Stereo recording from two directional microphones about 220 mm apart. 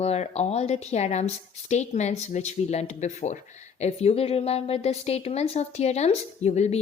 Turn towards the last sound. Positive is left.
turn(degrees=30)  # may be behind; listen again after turning